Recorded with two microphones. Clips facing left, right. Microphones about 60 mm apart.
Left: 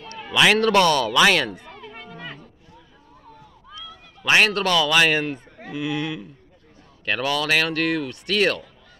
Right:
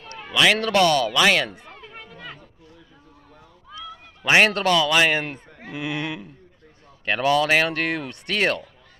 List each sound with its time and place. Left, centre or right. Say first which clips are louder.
0.3 s a man's voice: left 1 dB; centre
0.6 s speech: left 1 dB; centre
1.5 s a sound: left 4 dB; centre
4.3 s speech: right 1 dB; right
4.6 s speech: even; centre
5.8 s a sound: left 2 dB; right
7.1 s speech: right 3 dB; right